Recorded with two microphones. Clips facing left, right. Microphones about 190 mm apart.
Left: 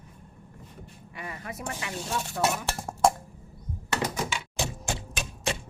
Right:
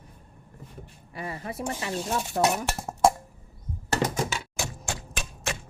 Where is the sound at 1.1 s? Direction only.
30° right (ahead or behind).